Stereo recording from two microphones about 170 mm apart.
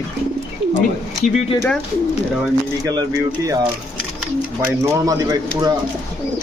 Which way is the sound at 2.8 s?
20° right (ahead or behind).